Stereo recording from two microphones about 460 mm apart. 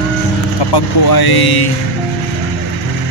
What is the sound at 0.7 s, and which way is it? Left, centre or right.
Speech, left.